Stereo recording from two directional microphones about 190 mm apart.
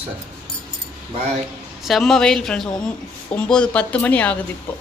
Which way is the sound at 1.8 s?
Centre (ahead or behind).